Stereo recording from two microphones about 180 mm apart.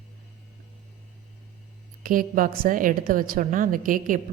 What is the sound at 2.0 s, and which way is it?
A woman's voice, 50° right (ahead or behind).